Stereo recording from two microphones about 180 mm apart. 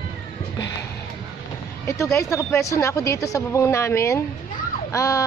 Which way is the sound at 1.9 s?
15° left (ahead or behind).